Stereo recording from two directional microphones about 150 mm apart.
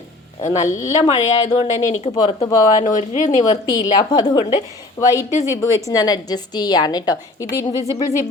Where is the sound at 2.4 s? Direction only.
55° left (ahead or behind).